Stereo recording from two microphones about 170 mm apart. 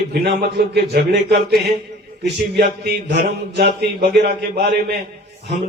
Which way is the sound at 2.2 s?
75° right (ahead or behind).